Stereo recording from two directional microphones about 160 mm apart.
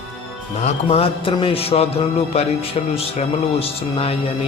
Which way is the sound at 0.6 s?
40° left (ahead or behind).